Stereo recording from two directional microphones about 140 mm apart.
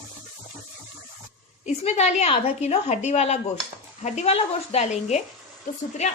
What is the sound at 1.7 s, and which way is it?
A woman's voice, 50° left (ahead or behind).